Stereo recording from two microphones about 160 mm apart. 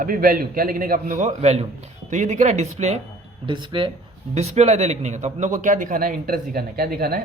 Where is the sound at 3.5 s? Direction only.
30° right (ahead or behind).